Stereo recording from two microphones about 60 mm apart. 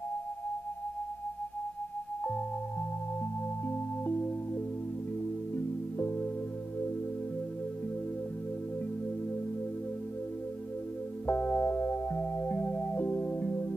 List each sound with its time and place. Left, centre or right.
4.0 s music: left
11.2 s music: left